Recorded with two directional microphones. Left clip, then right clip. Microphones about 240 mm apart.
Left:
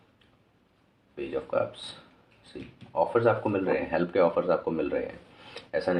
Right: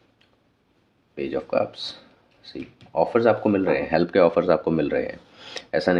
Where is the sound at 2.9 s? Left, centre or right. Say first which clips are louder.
Right 5 dB; right.